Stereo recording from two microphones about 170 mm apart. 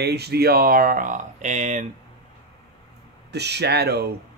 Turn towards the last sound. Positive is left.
turn(degrees=-70)  # may be behind; listen again after turning